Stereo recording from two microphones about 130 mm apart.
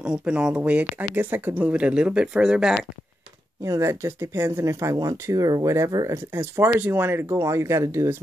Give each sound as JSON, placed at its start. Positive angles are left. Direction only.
{"t": 0.0, "sound": "speech", "side_deg": -10}
{"t": 3.6, "sound": "speech", "side_deg": -25}